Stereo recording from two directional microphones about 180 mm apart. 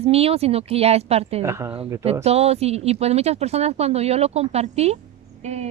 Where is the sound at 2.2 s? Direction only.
35° right (ahead or behind).